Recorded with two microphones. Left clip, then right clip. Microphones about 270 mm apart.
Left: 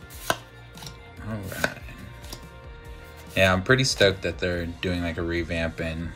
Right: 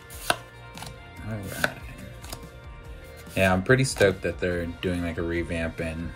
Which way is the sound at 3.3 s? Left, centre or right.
Centre.